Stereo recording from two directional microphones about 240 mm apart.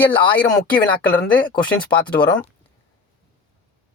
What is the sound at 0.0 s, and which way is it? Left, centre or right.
Speech, centre.